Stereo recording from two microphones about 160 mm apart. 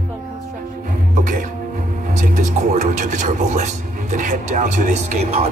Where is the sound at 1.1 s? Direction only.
55° right (ahead or behind).